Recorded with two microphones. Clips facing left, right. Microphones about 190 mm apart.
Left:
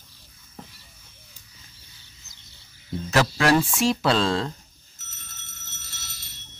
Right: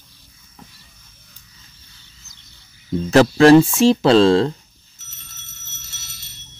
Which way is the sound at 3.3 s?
25° right (ahead or behind).